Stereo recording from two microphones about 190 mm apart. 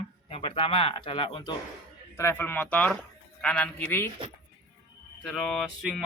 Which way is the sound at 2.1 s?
10° left (ahead or behind).